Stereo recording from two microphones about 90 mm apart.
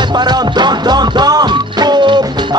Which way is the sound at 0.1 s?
50° right (ahead or behind).